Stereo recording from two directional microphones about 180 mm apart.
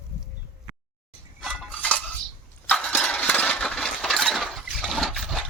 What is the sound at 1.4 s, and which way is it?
Dishes, centre (ahead or behind).